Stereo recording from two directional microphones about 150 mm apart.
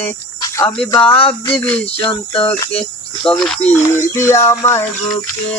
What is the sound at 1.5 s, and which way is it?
Speech, 10° left (ahead or behind).